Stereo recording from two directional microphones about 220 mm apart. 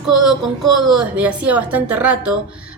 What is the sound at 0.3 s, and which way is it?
A woman's voice, centre (ahead or behind).